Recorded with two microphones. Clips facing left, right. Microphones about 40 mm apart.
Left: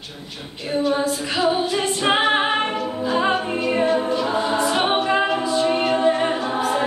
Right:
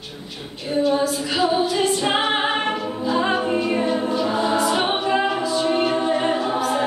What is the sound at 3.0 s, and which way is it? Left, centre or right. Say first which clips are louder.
Music: left 1 dB; centre.